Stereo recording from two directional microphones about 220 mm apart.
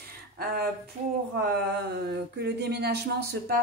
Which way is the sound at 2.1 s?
50° right (ahead or behind).